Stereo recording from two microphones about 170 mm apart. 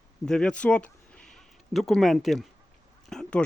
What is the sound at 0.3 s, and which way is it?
Speech, 5° left (ahead or behind).